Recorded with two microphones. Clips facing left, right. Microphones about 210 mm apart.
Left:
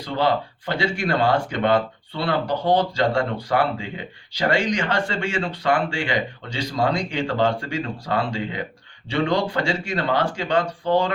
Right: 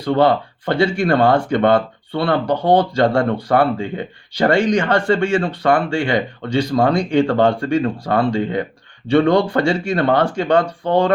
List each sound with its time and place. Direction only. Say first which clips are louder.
0.0 s speech: right 7 dB; 55° right (ahead or behind)